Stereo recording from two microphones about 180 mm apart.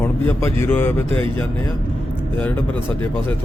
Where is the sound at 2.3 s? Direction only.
10° left (ahead or behind).